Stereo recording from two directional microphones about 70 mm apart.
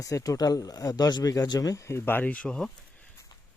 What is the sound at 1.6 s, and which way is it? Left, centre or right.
Speech, left.